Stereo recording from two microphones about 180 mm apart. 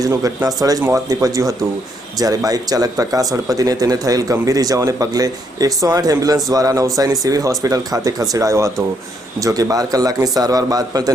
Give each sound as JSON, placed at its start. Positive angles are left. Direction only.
{"t": 0.0, "sound": "speech", "side_deg": -20}